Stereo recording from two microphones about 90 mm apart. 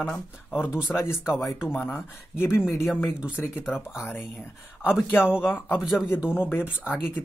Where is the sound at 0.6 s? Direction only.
25° left (ahead or behind).